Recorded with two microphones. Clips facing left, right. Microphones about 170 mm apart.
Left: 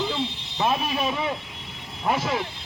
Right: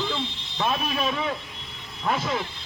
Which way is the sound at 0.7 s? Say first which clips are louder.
Left 1 dB; 20° left (ahead or behind).